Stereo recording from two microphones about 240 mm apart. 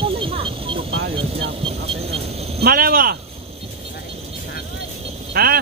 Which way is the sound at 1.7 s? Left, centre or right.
Right.